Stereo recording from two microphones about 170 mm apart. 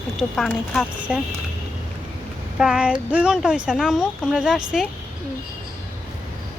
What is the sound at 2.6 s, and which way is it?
Speech, 5° right (ahead or behind).